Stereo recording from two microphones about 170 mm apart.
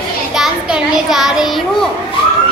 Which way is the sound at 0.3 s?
Centre (ahead or behind).